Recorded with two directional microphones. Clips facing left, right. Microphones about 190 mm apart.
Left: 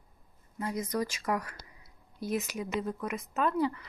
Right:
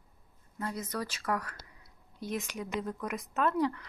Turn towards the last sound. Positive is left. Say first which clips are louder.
# even
turn(degrees=0)  # may be behind; listen again after turning